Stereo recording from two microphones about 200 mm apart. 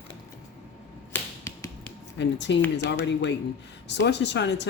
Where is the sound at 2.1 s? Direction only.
60° left (ahead or behind).